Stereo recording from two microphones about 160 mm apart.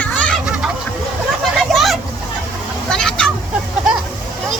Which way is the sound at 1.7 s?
Centre (ahead or behind).